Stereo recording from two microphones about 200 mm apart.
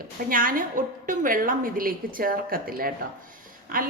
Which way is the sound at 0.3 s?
45° right (ahead or behind).